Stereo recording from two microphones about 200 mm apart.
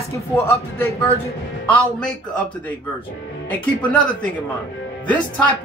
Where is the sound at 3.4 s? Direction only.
5° left (ahead or behind).